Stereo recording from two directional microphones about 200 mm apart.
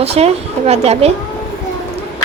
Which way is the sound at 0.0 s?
30° right (ahead or behind).